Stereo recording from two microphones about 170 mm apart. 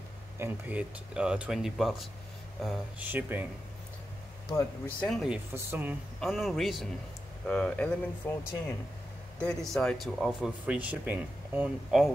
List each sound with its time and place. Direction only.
0.4 s speech: 10° right (ahead or behind)
3.1 s speech: 10° right (ahead or behind)
4.5 s speech: 15° left (ahead or behind)
5.0 s speech: centre (ahead or behind)
5.5 s speech: 15° right (ahead or behind)
6.2 s speech: centre (ahead or behind)